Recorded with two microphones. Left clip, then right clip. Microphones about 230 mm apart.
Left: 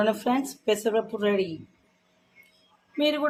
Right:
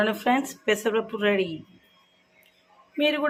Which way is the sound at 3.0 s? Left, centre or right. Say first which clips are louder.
Right 1 dB; centre.